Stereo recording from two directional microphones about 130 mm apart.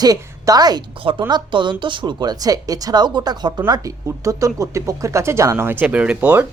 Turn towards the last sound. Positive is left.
turn(degrees=-10)  # may be behind; listen again after turning